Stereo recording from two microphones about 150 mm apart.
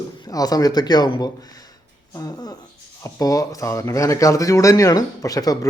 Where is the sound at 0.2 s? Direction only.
25° left (ahead or behind).